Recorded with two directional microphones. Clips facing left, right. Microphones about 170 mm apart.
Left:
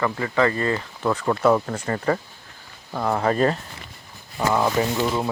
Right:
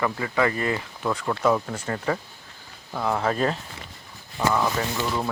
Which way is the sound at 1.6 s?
5° right (ahead or behind).